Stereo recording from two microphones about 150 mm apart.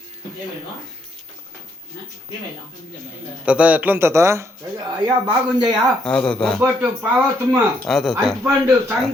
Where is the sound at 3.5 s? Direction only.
10° right (ahead or behind).